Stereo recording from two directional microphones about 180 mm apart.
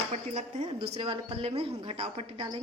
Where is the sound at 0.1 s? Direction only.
40° right (ahead or behind).